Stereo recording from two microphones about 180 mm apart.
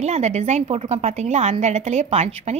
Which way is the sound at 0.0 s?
40° right (ahead or behind).